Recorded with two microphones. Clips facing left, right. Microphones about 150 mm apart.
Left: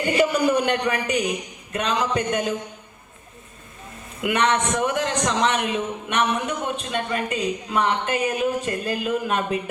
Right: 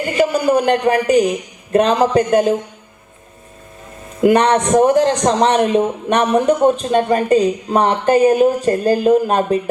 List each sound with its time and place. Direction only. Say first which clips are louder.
0.2 s a man's voice: right 6 dB; 40° right (ahead or behind)
4.2 s a man's voice: right 9 dB; 35° right (ahead or behind)